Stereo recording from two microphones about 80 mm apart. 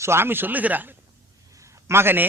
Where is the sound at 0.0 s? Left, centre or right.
Right.